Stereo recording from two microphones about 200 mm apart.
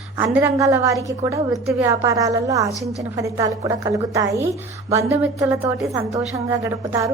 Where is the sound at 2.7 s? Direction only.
15° left (ahead or behind).